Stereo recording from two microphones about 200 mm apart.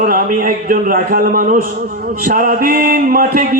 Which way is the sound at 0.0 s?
45° right (ahead or behind).